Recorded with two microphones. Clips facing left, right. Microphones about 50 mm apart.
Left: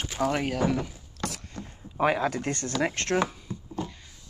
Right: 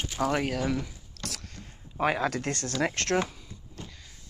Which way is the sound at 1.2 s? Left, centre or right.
Centre.